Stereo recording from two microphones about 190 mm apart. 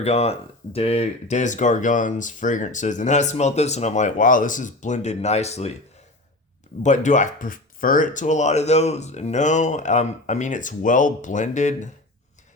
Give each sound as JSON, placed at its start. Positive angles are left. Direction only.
{"t": 0.0, "sound": "speech", "side_deg": 35}
{"t": 6.8, "sound": "speech", "side_deg": 40}